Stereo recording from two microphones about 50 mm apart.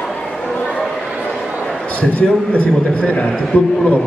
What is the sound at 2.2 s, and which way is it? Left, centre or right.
A man's voice, left.